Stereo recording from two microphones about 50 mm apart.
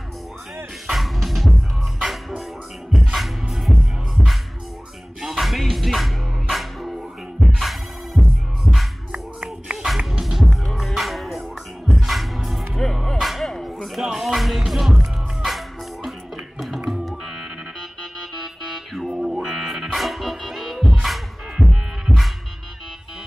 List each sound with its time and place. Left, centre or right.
0.9 s music: centre
2.9 s music: centre
5.2 s music: centre
9.1 s a sound: right
9.8 s music: centre
19.0 s music: centre